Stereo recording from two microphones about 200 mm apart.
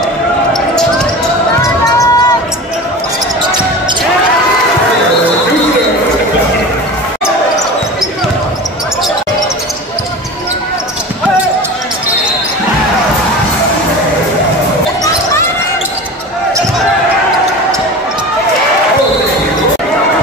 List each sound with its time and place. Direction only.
1.6 s basketball bounce: 15° left (ahead or behind)